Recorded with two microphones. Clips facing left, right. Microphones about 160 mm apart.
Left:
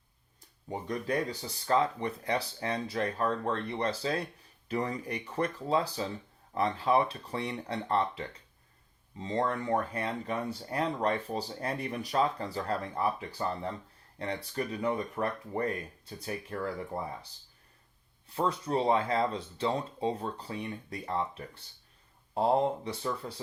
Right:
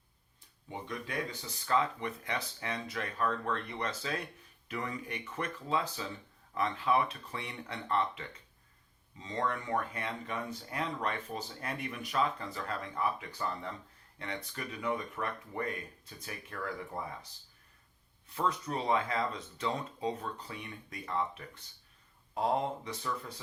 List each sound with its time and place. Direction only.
0.7 s speech: 40° left (ahead or behind)
18.3 s speech: 30° left (ahead or behind)